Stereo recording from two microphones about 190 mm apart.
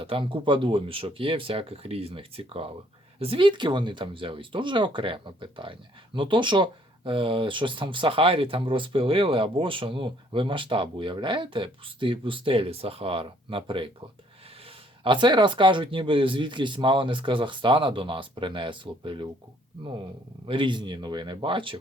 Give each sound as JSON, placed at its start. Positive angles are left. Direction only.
{"t": 0.0, "sound": "speech", "side_deg": -30}
{"t": 20.5, "sound": "speech", "side_deg": -25}